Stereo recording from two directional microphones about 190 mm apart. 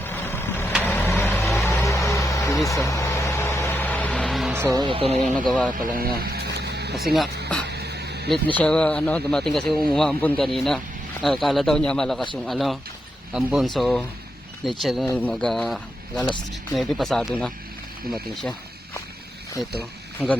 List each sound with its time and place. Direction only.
0.0 s vehicle: 10° left (ahead or behind)
4.5 s music: 10° right (ahead or behind)
4.8 s speech: 25° right (ahead or behind)
5.4 s speech: 5° left (ahead or behind)
5.8 s a sound: 50° right (ahead or behind)
6.9 s speech: centre (ahead or behind)
7.7 s a sound: 60° right (ahead or behind)
8.3 s speech: 5° left (ahead or behind)